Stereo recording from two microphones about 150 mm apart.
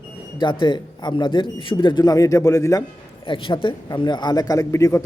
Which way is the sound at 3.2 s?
35° left (ahead or behind).